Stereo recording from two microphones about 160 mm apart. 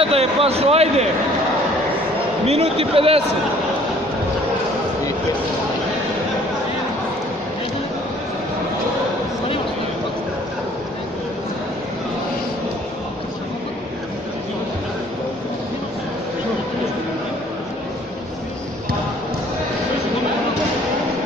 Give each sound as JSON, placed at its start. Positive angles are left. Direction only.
{"t": 0.0, "sound": "speech", "side_deg": -40}
{"t": 2.4, "sound": "speech", "side_deg": -40}